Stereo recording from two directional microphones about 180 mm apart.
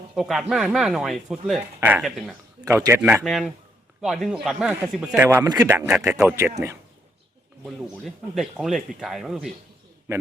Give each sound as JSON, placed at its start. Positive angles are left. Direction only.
{"t": 0.2, "sound": "speech", "side_deg": 0}
{"t": 2.6, "sound": "speech", "side_deg": -15}
{"t": 3.2, "sound": "speech", "side_deg": 0}
{"t": 7.6, "sound": "speech", "side_deg": 0}